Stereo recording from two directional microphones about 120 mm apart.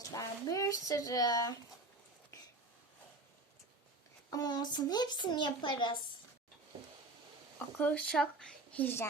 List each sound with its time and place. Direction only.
0.0 s speech: 30° left (ahead or behind)
4.3 s speech: 35° left (ahead or behind)
7.8 s speech: 10° left (ahead or behind)